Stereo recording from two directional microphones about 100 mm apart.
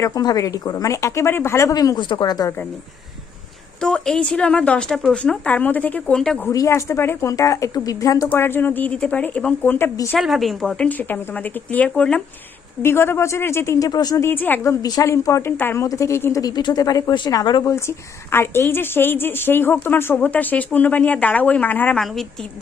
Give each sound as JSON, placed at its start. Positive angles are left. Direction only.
{"t": 0.1, "sound": "a woman's voice", "side_deg": 40}
{"t": 2.0, "sound": "speech", "side_deg": 50}
{"t": 3.8, "sound": "a woman's voice", "side_deg": 5}
{"t": 6.5, "sound": "a woman's voice", "side_deg": 30}
{"t": 8.3, "sound": "a woman's voice", "side_deg": 20}
{"t": 9.7, "sound": "speech", "side_deg": 25}
{"t": 10.2, "sound": "a woman's voice", "side_deg": 0}
{"t": 12.8, "sound": "speech", "side_deg": 25}
{"t": 14.2, "sound": "a woman's voice", "side_deg": 20}
{"t": 17.6, "sound": "a woman's voice", "side_deg": 25}
{"t": 21.9, "sound": "a woman's voice", "side_deg": 0}